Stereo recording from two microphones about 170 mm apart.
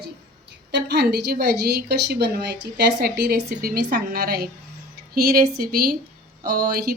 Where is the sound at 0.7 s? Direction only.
75° right (ahead or behind).